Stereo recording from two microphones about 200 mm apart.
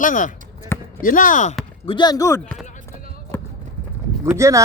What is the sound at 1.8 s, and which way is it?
Speech, 20° left (ahead or behind).